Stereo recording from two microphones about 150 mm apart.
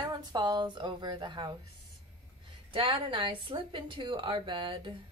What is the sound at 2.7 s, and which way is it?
A woman's voice, 35° right (ahead or behind).